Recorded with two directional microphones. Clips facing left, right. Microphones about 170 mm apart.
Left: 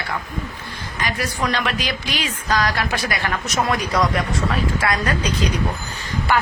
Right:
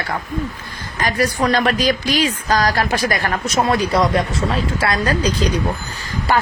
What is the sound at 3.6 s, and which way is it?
A woman's voice, 30° right (ahead or behind).